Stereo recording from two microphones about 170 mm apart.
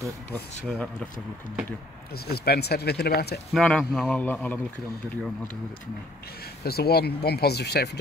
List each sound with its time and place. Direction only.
0.7 s a man's voice: 5° left (ahead or behind)
2.2 s speech: 65° left (ahead or behind)
3.5 s a man's voice: 5° left (ahead or behind)
6.6 s speech: 65° left (ahead or behind)